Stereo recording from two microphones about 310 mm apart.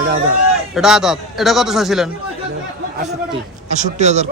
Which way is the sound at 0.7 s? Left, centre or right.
Centre.